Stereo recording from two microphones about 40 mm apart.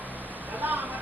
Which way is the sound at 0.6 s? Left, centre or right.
Right.